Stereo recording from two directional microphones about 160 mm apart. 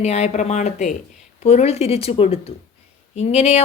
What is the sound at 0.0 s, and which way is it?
A woman's voice, 40° left (ahead or behind).